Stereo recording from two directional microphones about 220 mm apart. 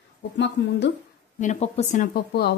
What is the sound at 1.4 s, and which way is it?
Speech, 30° left (ahead or behind).